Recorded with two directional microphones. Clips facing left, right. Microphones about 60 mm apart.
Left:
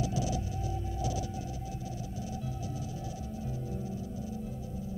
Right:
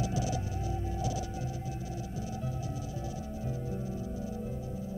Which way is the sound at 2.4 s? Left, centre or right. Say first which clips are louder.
Right 1 dB; right.